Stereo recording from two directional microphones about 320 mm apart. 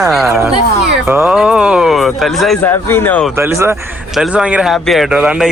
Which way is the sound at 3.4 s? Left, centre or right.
Centre.